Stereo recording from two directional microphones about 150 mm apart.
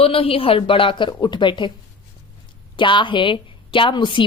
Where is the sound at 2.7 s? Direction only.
30° left (ahead or behind).